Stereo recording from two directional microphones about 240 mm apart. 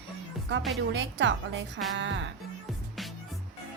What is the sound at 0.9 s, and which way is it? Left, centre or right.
A woman's voice, right.